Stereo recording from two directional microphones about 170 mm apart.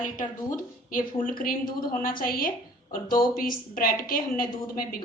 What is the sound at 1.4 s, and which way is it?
A woman's voice, 55° left (ahead or behind).